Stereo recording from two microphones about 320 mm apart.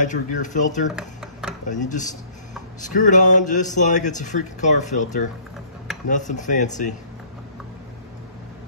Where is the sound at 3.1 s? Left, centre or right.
Left.